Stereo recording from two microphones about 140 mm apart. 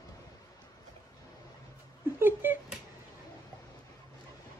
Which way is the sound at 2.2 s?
15° right (ahead or behind).